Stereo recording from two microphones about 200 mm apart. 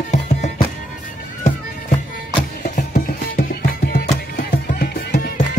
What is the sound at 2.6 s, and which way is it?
Music, 40° left (ahead or behind).